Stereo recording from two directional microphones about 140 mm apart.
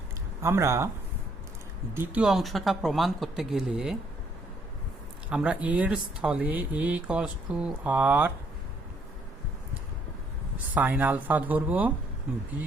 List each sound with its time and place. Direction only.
0.4 s speech: 20° right (ahead or behind)
1.9 s speech: 15° right (ahead or behind)
2.2 s speech: centre (ahead or behind)
5.3 s speech: 10° right (ahead or behind)
10.8 s speech: 10° right (ahead or behind)